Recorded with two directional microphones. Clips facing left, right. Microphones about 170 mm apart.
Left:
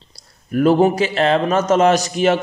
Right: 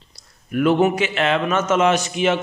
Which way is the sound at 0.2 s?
35° left (ahead or behind).